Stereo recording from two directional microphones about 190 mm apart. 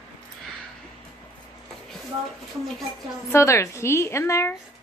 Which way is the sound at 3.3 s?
15° left (ahead or behind).